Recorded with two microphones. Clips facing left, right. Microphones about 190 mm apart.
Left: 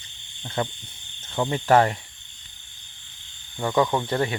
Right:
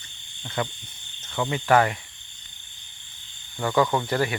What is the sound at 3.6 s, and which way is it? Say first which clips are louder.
Speech: even; 5° left (ahead or behind).